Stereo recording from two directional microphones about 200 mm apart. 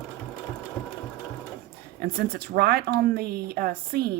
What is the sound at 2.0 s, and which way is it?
Speech, 50° right (ahead or behind).